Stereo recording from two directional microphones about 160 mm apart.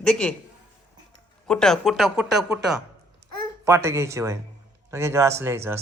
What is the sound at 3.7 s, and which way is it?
Speech, 15° right (ahead or behind).